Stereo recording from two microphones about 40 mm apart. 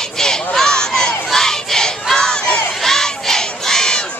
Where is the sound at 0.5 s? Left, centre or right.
Centre.